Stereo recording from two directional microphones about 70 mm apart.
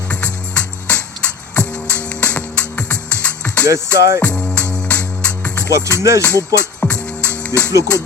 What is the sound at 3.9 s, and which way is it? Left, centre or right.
Music, right.